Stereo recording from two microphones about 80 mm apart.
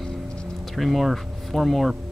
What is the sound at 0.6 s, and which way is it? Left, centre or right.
Speech, centre.